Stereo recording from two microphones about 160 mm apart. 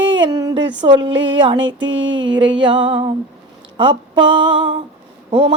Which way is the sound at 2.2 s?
30° right (ahead or behind).